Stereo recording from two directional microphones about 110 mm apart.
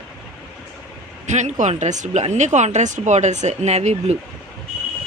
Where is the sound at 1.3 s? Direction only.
90° right.